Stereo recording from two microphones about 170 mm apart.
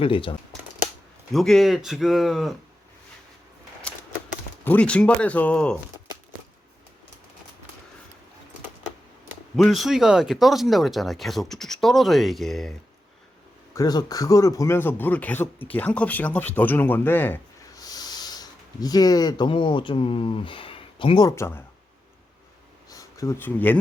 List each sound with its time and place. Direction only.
0.0 s speech: 30° left (ahead or behind)
1.3 s speech: centre (ahead or behind)
3.9 s typewriter: 5° left (ahead or behind)
4.6 s speech: 10° left (ahead or behind)
9.6 s speech: centre (ahead or behind)
13.7 s speech: 20° left (ahead or behind)
17.8 s speech: 25° left (ahead or behind)
21.2 s speech: 15° left (ahead or behind)
22.9 s speech: 20° left (ahead or behind)